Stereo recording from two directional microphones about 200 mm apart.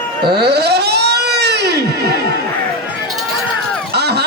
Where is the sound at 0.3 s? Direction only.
55° right (ahead or behind).